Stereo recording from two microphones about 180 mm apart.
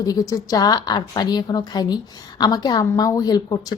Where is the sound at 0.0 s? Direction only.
20° left (ahead or behind).